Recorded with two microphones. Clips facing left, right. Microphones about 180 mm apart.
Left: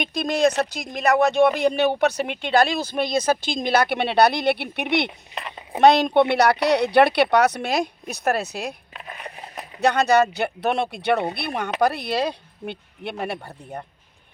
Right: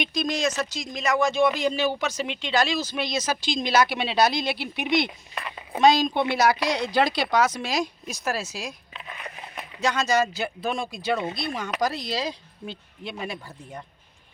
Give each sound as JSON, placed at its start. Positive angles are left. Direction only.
{"t": 0.0, "sound": "speech", "side_deg": 60}
{"t": 5.3, "sound": "speech", "side_deg": 20}
{"t": 5.8, "sound": "a woman's voice", "side_deg": 65}
{"t": 9.8, "sound": "speech", "side_deg": 60}